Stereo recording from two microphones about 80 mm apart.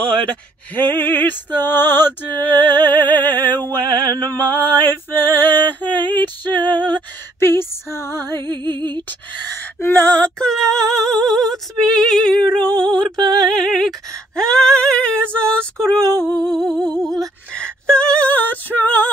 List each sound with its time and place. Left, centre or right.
0.0 s speech: centre
0.8 s music: left
6.1 s female singing: left
6.5 s female singing: right
7.3 s female singing: left
8.6 s music: right
9.8 s music: left
10.5 s female singing: centre
16.4 s music: centre
17.6 s a sound: centre